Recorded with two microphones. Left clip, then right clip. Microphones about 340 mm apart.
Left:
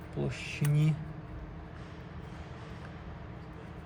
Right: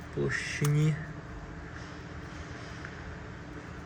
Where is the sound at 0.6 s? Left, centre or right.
Centre.